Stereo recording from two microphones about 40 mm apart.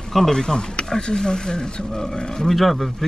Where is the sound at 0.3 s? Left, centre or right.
Centre.